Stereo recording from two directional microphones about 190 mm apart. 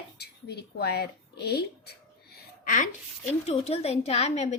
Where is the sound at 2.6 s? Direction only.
45° left (ahead or behind).